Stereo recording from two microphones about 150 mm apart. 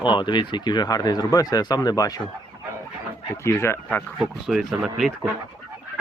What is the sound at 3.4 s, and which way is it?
Speech, 20° left (ahead or behind).